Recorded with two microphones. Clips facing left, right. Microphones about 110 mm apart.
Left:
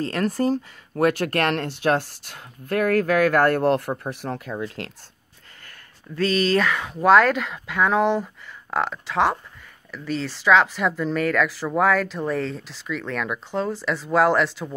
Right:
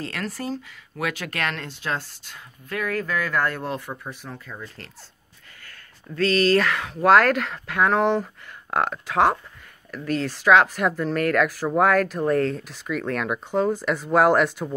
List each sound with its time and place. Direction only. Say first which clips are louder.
0.0 s speech: left 8 dB; 40° left (ahead or behind); by 4.9 s 80° left
6.6 s speech: left 1 dB; 5° left (ahead or behind)